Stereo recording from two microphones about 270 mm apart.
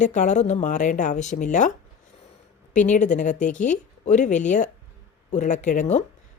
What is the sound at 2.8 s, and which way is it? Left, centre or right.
Speech, left.